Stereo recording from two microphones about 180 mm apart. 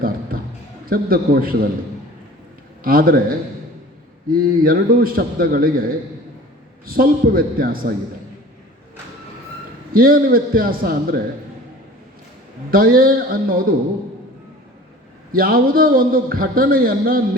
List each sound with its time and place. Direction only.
0.9 s a man's voice: 55° right (ahead or behind)
2.8 s a man's voice: 55° right (ahead or behind)
6.8 s a man's voice: 55° right (ahead or behind)
9.9 s a man's voice: 55° right (ahead or behind)
12.7 s a man's voice: 55° right (ahead or behind)
15.3 s a man's voice: 55° right (ahead or behind)